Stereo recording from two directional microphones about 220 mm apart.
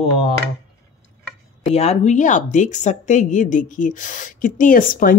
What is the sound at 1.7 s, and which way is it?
Speech, 30° left (ahead or behind).